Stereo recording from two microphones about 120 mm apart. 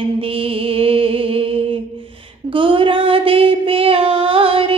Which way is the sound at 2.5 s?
45° right (ahead or behind).